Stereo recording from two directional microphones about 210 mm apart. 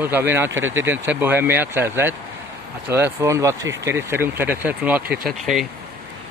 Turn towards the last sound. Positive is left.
turn(degrees=0)  # may be behind; listen again after turning